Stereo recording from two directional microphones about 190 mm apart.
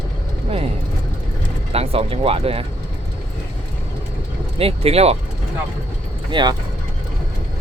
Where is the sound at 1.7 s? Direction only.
30° right (ahead or behind).